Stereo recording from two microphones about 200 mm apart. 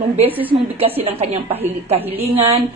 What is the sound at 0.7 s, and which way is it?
A woman's voice, 30° right (ahead or behind).